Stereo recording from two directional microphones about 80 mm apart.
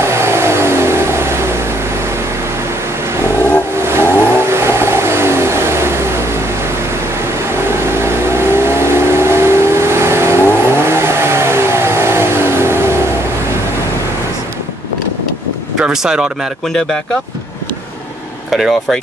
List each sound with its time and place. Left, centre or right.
0.0 s vehicle: right
3.4 s vehicle: right
7.6 s vehicle: right
15.8 s a sound: centre
16.6 s speech: centre
18.5 s speech: centre